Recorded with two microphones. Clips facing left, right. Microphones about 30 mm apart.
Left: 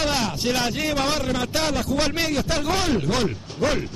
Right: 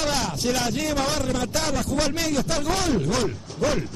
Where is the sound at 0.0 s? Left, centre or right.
Centre.